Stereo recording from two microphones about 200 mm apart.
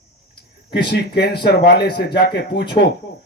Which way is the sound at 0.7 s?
55° left (ahead or behind).